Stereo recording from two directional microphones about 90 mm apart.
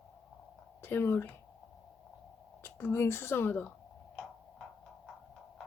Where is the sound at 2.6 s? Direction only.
25° left (ahead or behind).